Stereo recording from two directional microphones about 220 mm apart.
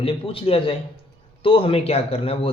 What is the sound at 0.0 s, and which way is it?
Speech, 25° left (ahead or behind).